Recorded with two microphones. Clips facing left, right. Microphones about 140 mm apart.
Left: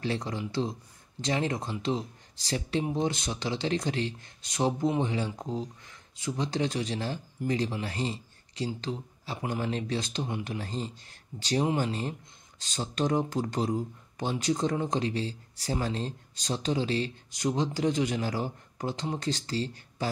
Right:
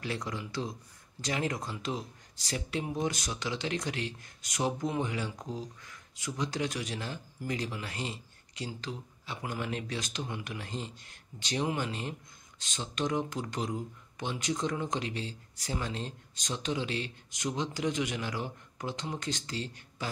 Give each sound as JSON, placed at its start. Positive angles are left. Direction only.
{"t": 0.0, "sound": "speech", "side_deg": 30}